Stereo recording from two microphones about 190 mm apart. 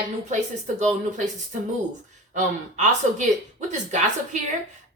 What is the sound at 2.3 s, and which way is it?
Speech, 40° right (ahead or behind).